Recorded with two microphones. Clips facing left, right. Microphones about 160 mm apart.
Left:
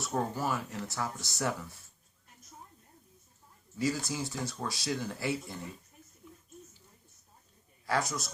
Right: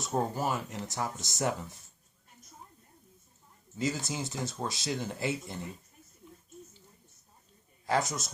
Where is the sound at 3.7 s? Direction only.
20° right (ahead or behind).